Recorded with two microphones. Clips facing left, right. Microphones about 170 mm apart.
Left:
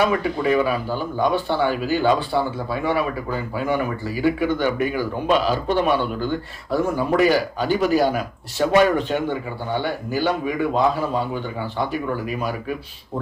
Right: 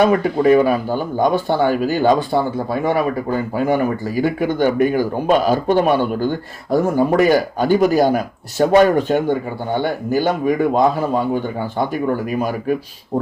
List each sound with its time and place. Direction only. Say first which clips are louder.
0.0 s speech: right 6 dB; 45° right (ahead or behind)